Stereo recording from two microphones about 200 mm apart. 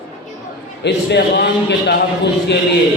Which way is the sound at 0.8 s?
60° left (ahead or behind).